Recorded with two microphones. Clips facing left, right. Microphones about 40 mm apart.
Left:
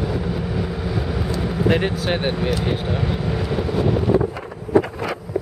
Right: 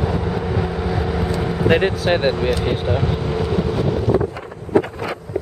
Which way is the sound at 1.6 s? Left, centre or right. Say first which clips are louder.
Right 4 dB; right.